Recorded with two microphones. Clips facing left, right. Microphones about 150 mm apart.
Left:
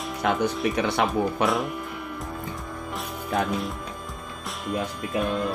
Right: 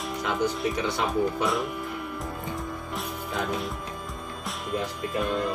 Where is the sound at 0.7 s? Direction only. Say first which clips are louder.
Left 3 dB; 65° left (ahead or behind).